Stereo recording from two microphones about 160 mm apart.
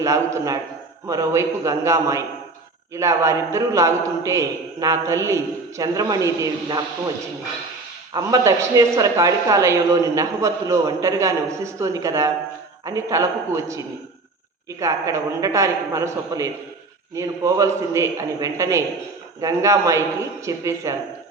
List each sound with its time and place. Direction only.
0.0 s speech: 20° right (ahead or behind)
8.1 s speech: 20° right (ahead or behind)